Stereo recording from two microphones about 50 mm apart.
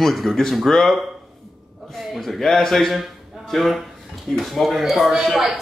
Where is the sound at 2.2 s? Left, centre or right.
Centre.